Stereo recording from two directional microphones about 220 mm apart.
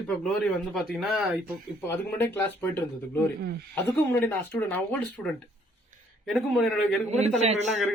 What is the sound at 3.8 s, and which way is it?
A woman's voice, 10° left (ahead or behind).